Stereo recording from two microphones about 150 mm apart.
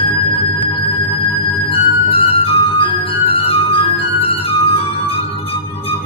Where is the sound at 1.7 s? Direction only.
35° left (ahead or behind).